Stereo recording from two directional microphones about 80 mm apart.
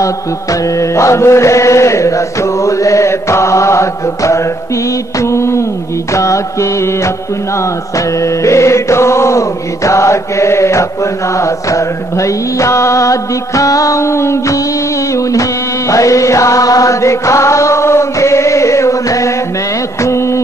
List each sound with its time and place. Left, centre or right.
0.7 s chant: left
8.2 s chant: left
15.9 s chant: left
20.0 s music: left